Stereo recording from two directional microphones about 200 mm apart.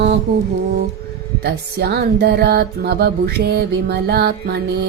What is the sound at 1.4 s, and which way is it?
Music, 55° right (ahead or behind).